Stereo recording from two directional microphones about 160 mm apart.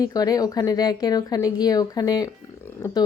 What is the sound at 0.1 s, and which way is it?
A woman's voice, 25° left (ahead or behind).